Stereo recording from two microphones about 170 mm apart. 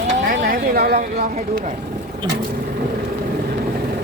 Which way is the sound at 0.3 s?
60° right (ahead or behind).